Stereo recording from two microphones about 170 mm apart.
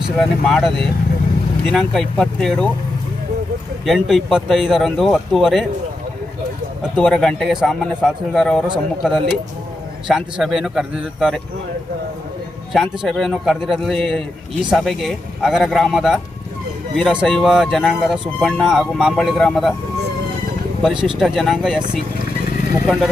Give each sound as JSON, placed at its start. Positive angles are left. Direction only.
{"t": 0.2, "sound": "speech", "side_deg": 0}
{"t": 3.8, "sound": "speech", "side_deg": 0}
{"t": 6.9, "sound": "speech", "side_deg": 5}
{"t": 12.7, "sound": "speech", "side_deg": 0}
{"t": 20.8, "sound": "speech", "side_deg": -5}